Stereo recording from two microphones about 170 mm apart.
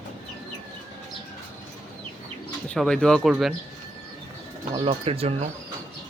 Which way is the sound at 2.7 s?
5° left (ahead or behind).